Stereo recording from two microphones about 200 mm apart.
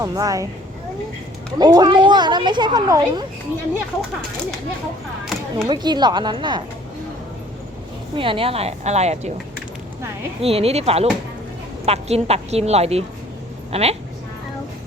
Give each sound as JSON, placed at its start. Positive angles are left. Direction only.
{"t": 0.0, "sound": "speech", "side_deg": -15}
{"t": 1.5, "sound": "speech", "side_deg": -20}
{"t": 5.6, "sound": "speech", "side_deg": -20}
{"t": 8.1, "sound": "a woman's voice", "side_deg": -25}
{"t": 10.4, "sound": "a woman's voice", "side_deg": -30}